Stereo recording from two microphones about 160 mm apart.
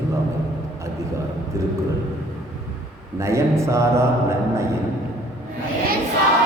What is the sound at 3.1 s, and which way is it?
A man's voice, 20° right (ahead or behind).